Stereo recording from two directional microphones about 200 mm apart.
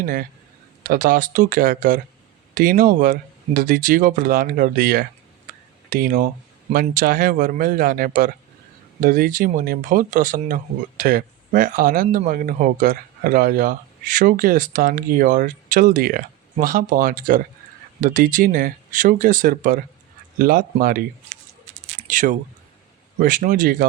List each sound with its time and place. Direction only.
0.0 s speech: 45° right (ahead or behind)
22.0 s speech: 40° right (ahead or behind)